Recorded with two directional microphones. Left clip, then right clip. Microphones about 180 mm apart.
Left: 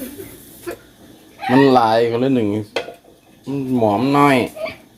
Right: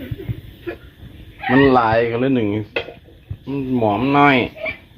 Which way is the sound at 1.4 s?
20° left (ahead or behind).